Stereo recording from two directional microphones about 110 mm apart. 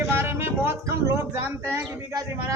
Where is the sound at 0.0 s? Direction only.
20° right (ahead or behind).